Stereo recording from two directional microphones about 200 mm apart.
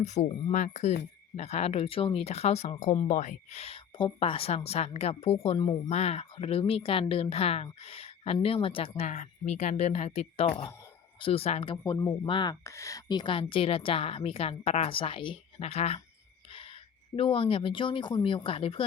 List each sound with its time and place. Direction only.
0.0 s speech: 35° left (ahead or behind)
5.9 s speech: 30° left (ahead or behind)
16.5 s a sound: 25° left (ahead or behind)
17.2 s speech: 25° left (ahead or behind)